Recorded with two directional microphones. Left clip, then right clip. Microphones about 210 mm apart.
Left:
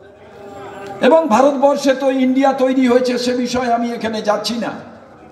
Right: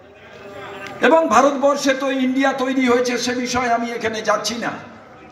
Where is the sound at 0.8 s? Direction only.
40° left (ahead or behind).